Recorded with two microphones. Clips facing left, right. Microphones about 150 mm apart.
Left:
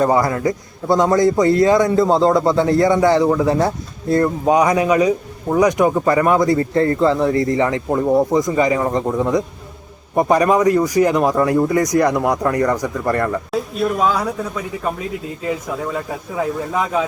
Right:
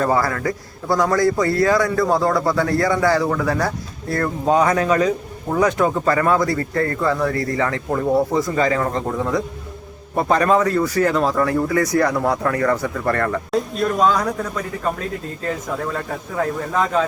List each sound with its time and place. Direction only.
0.0 s a man's voice: 20° left (ahead or behind)
13.5 s a man's voice: 5° left (ahead or behind)